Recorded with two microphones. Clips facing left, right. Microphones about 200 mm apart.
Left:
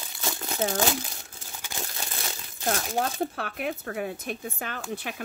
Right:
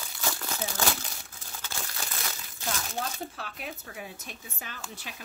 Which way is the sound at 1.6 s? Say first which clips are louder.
Left 3 dB; 15° left (ahead or behind).